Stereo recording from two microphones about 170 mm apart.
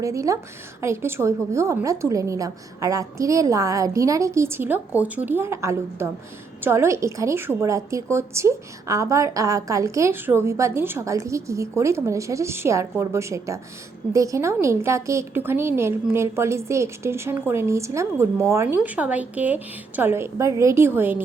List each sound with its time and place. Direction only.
0.0 s a woman's voice: 20° right (ahead or behind)